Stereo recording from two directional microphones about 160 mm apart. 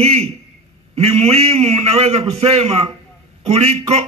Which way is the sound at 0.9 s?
40° right (ahead or behind).